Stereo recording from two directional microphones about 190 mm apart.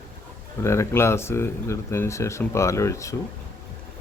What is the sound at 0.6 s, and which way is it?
A man's voice, 15° left (ahead or behind).